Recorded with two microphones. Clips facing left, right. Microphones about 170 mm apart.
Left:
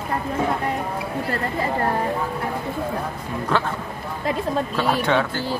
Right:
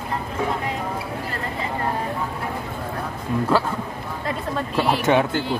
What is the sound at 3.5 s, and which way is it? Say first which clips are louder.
Speech: right 2 dB; 5° right (ahead or behind).